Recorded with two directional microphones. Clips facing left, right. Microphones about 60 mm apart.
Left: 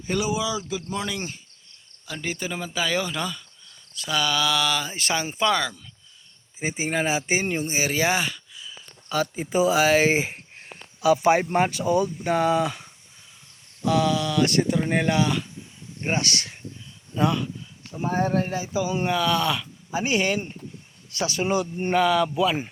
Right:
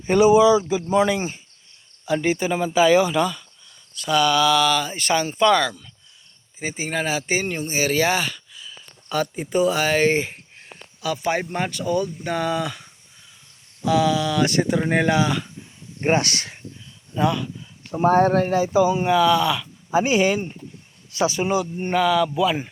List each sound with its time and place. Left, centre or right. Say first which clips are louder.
0.0 s speech: right 12 dB; right; by 5.8 s centre
6.6 s speech: even; centre
11.0 s speech: left 5 dB; centre
13.9 s speech: right 3 dB; centre
16.0 s speech: right 6 dB; right
17.2 s speech: right 2 dB; centre
17.9 s speech: right 7 dB; right
18.9 s speech: right 5 dB; centre
19.9 s speech: right 6 dB; right
20.1 s speech: right 4 dB; centre
21.4 s speech: right 1 dB; centre